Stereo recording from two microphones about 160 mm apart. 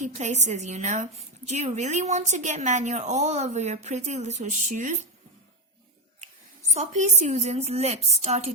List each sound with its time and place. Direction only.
0.0 s a woman's voice: 45° right (ahead or behind)
6.7 s a woman's voice: 45° right (ahead or behind)